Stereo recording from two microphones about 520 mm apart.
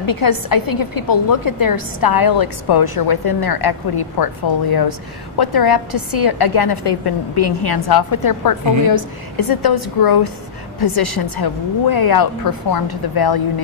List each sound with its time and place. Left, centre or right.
0.0 s a woman's voice: left